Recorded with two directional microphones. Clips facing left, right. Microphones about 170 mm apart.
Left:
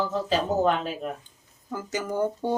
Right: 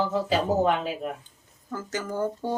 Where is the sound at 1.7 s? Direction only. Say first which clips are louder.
Left 2 dB; 15° left (ahead or behind).